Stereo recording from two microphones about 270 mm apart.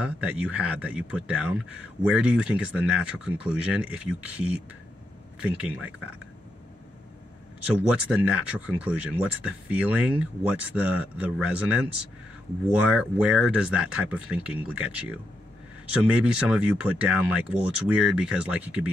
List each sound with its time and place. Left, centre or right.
0.0 s speech: centre
7.9 s speech: centre
12.9 s speech: centre